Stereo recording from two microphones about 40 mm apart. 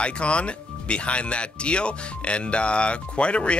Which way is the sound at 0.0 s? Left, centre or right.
Left.